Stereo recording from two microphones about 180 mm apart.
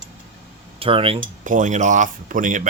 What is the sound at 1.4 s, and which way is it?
Speech, 45° right (ahead or behind).